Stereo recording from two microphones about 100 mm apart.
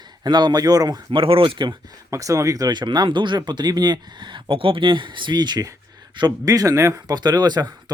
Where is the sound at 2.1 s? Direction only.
35° right (ahead or behind).